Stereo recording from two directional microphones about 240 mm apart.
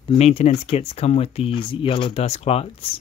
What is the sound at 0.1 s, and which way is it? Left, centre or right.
Speech, left.